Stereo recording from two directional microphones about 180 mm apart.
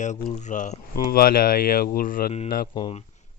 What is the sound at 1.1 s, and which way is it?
Speech, 55° left (ahead or behind).